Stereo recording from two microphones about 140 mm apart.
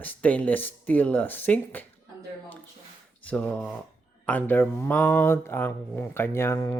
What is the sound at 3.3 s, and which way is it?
Speech, 10° left (ahead or behind).